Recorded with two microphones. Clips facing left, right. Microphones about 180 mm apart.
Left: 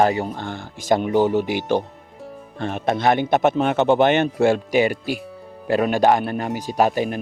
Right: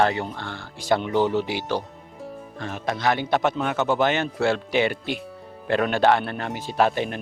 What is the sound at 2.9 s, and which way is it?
Speech, 50° left (ahead or behind).